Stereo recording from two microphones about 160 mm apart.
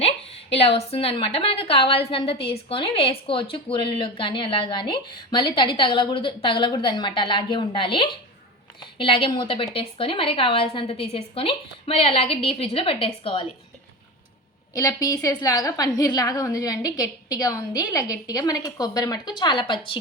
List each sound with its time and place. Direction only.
0.0 s a woman's voice: 40° left (ahead or behind)
14.7 s a woman's voice: 20° left (ahead or behind)